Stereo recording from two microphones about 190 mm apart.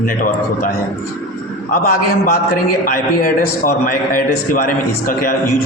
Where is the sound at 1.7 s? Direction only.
50° left (ahead or behind).